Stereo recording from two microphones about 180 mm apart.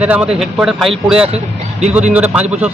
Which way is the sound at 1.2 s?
35° right (ahead or behind).